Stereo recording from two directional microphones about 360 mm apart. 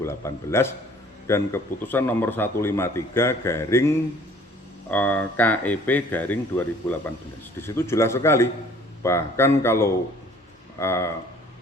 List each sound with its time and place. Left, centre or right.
0.0 s a man's voice: centre